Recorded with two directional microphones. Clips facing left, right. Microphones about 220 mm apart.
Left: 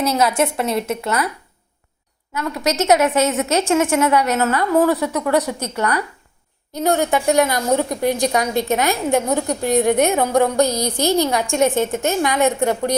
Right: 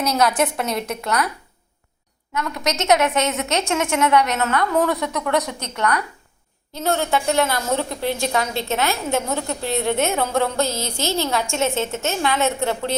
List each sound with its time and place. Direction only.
0.0 s a woman's voice: 5° left (ahead or behind)
2.3 s a woman's voice: 5° left (ahead or behind)